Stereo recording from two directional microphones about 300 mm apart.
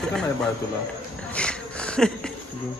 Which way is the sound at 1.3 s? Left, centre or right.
Centre.